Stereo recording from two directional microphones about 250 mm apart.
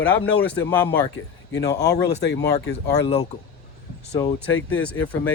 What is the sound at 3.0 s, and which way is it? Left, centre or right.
Speech, left.